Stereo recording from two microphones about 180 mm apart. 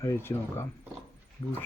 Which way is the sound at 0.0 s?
15° left (ahead or behind).